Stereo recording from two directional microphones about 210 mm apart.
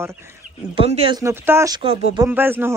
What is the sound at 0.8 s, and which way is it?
Speech, 25° right (ahead or behind).